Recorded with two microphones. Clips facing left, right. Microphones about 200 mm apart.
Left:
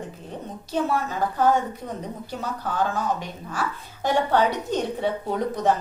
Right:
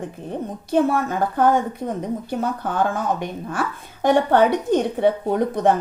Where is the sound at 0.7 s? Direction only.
50° right (ahead or behind).